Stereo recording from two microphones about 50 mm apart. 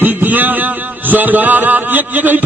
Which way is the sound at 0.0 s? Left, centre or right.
Right.